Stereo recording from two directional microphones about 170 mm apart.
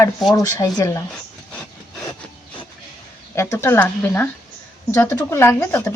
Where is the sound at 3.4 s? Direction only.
15° left (ahead or behind).